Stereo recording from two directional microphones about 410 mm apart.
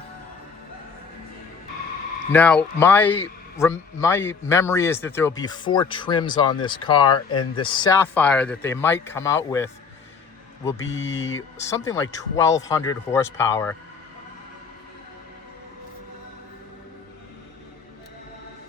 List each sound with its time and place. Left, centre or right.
2.3 s a man's voice: centre
10.9 s speech: left
11.5 s a man's voice: centre